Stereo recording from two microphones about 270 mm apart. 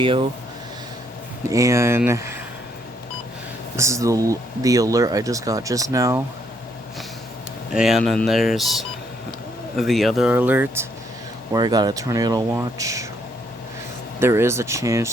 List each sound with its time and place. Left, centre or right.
0.0 s speech: centre
1.5 s speech: centre
3.8 s speech: centre
7.7 s speech: centre
14.2 s speech: centre